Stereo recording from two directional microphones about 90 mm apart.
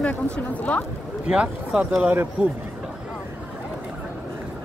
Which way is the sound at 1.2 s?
10° right (ahead or behind).